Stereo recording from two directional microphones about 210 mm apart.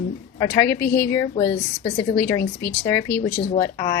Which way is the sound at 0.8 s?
50° left (ahead or behind).